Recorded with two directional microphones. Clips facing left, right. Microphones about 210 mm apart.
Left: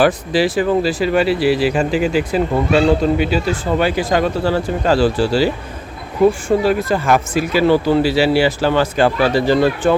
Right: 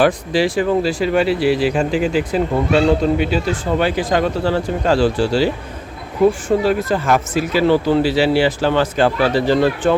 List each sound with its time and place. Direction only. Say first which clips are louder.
0.0 s speech: left 1 dB; 5° left (ahead or behind)
6.6 s speech: left 1 dB; 10° left (ahead or behind)